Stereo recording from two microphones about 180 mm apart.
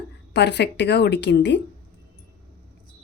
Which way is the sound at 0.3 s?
70° left (ahead or behind).